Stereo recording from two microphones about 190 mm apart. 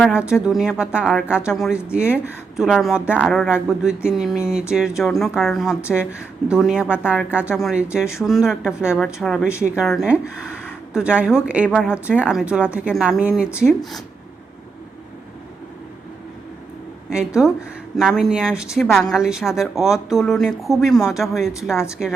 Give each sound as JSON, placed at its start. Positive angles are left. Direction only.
{"t": 0.0, "sound": "speech", "side_deg": -5}
{"t": 17.1, "sound": "speech", "side_deg": -5}